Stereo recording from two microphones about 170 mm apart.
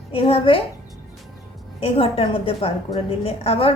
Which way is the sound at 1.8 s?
35° left (ahead or behind).